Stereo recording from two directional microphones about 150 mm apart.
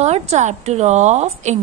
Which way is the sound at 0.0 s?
45° right (ahead or behind).